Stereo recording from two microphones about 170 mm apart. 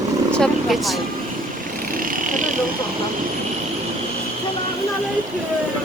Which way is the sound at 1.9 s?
55° right (ahead or behind).